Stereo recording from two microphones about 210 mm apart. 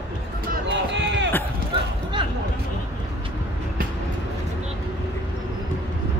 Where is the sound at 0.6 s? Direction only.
55° right (ahead or behind).